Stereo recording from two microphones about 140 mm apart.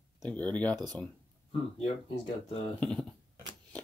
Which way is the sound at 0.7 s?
30° right (ahead or behind).